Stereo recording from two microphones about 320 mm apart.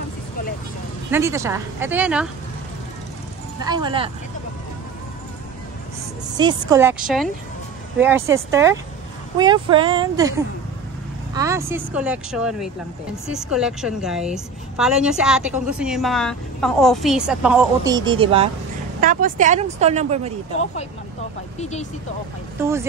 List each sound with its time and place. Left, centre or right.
1.1 s speech: centre
3.6 s speech: centre
6.3 s speech: centre
11.3 s a woman's voice: centre
21.5 s speech: left
22.6 s speech: centre